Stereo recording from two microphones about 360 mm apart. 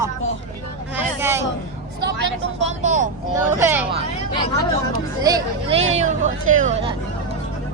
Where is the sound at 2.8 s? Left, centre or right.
Centre.